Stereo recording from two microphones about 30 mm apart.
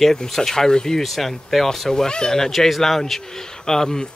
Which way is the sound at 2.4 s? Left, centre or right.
Centre.